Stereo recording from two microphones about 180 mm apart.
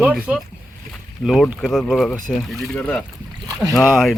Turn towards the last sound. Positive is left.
turn(degrees=0)  # may be behind; listen again after turning